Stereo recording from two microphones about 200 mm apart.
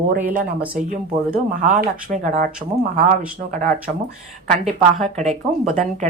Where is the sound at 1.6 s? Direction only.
35° right (ahead or behind).